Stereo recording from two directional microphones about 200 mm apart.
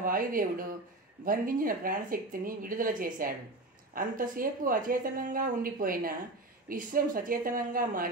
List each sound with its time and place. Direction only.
0.0 s a woman's voice: 45° right (ahead or behind)